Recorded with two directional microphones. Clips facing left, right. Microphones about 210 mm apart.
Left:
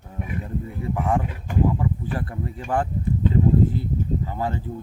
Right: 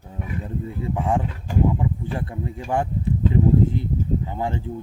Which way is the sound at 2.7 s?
10° right (ahead or behind).